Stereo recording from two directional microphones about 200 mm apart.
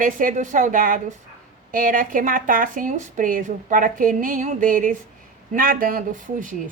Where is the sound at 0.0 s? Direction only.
40° right (ahead or behind).